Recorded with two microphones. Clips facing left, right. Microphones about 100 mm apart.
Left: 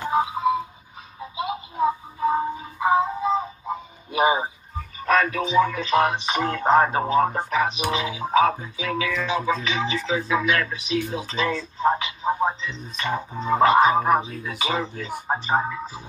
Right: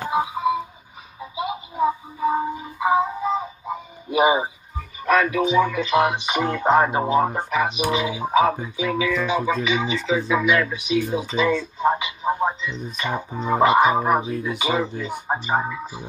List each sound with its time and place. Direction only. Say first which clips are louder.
0.1 s music: even; 5° right (ahead or behind)
4.1 s speech: right 2 dB; 5° right (ahead or behind)
11.8 s telephone: left 1 dB; 10° right (ahead or behind)
12.9 s speech: left 2 dB; 10° right (ahead or behind)